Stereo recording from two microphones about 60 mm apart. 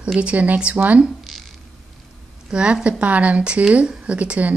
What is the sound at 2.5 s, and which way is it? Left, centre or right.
Speech, centre.